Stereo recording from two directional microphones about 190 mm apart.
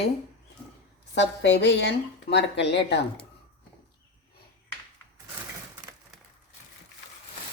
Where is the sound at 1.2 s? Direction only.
65° left (ahead or behind).